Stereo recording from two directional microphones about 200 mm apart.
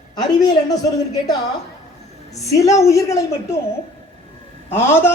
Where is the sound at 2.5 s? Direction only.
15° left (ahead or behind).